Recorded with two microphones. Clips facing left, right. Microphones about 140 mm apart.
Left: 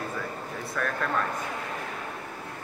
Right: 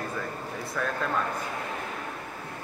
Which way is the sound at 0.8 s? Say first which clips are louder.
Even; 10° right (ahead or behind).